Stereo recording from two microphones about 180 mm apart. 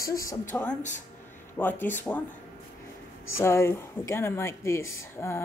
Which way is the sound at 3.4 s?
15° left (ahead or behind).